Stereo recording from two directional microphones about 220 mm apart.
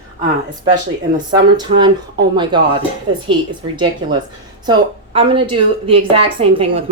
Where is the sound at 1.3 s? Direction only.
20° right (ahead or behind).